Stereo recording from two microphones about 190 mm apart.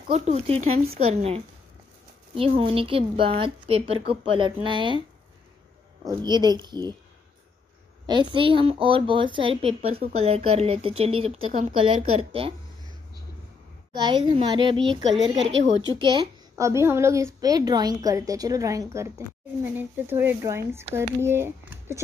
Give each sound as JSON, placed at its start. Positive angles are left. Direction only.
{"t": 0.1, "sound": "a woman's voice", "side_deg": -35}
{"t": 6.0, "sound": "a woman's voice", "side_deg": -20}
{"t": 8.1, "sound": "a woman's voice", "side_deg": -25}
{"t": 13.9, "sound": "a woman's voice", "side_deg": -25}
{"t": 16.0, "sound": "a woman's voice", "side_deg": -25}